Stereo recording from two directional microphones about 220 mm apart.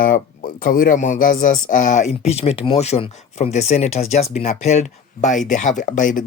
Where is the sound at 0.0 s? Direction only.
40° left (ahead or behind).